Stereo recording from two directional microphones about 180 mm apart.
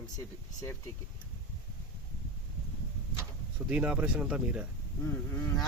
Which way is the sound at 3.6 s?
5° right (ahead or behind).